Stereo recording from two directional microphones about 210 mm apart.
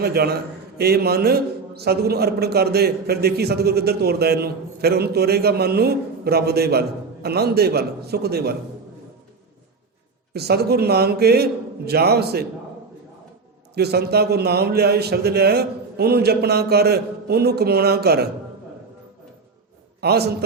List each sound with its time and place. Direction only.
0.0 s a man's voice: 50° right (ahead or behind)
10.3 s a man's voice: 50° right (ahead or behind)
13.7 s a man's voice: 50° right (ahead or behind)
20.0 s a man's voice: 50° right (ahead or behind)